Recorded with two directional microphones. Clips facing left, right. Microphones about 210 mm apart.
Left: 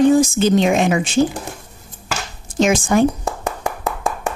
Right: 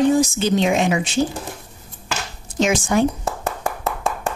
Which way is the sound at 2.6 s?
50° left (ahead or behind).